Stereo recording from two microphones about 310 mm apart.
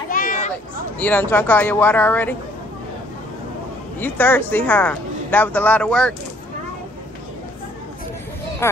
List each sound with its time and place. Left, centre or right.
0.1 s a sound: left
0.9 s a woman's voice: centre
4.0 s a woman's voice: centre